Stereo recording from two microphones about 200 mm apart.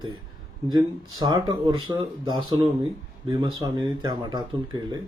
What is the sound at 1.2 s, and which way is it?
Speech, 20° right (ahead or behind).